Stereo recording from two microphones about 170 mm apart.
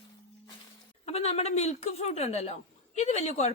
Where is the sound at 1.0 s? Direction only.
40° left (ahead or behind).